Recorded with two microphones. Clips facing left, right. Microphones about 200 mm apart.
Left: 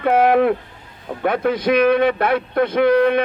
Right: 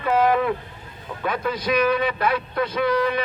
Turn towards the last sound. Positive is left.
turn(degrees=55)  # may be behind; listen again after turning